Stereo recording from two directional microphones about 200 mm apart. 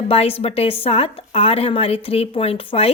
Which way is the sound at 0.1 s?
30° left (ahead or behind).